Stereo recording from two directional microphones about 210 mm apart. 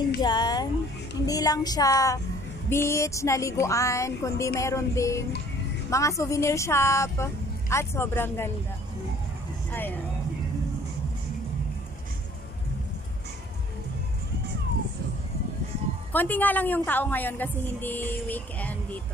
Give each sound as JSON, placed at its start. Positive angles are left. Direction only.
{"t": 0.2, "sound": "a sound", "side_deg": 20}
{"t": 2.7, "sound": "a woman's voice", "side_deg": 10}
{"t": 9.7, "sound": "vehicle", "side_deg": 10}
{"t": 16.1, "sound": "a woman's voice", "side_deg": 10}